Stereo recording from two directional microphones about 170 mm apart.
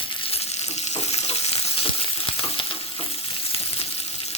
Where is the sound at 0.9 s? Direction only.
40° left (ahead or behind).